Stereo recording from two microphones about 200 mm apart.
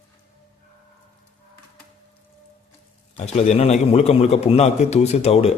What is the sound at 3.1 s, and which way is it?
A man's voice, 35° left (ahead or behind).